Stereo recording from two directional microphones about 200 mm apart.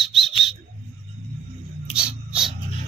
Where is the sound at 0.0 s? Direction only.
Centre (ahead or behind).